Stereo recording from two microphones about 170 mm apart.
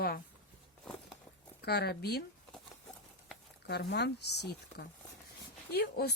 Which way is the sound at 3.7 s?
75° left (ahead or behind).